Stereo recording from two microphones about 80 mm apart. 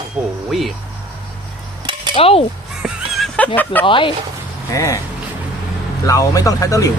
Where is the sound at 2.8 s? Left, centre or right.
Centre.